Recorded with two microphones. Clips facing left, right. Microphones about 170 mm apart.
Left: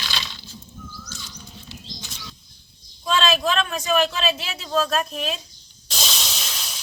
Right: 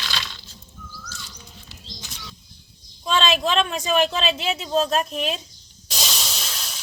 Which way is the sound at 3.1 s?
25° right (ahead or behind).